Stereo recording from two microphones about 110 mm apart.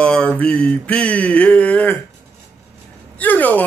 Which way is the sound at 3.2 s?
15° left (ahead or behind).